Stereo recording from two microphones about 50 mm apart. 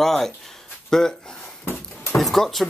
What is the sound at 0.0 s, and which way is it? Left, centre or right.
Speech, centre.